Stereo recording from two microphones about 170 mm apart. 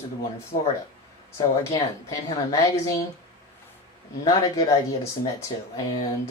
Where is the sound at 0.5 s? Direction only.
55° left (ahead or behind).